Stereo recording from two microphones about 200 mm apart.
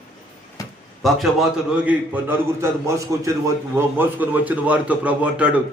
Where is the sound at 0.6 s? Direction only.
15° left (ahead or behind).